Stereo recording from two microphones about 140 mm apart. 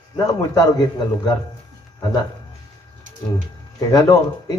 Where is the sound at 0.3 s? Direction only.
30° left (ahead or behind).